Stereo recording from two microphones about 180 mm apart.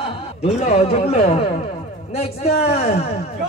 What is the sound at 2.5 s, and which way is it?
Speech, 60° left (ahead or behind).